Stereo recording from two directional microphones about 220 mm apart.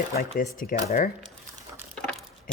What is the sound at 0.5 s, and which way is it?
Speech, 40° left (ahead or behind).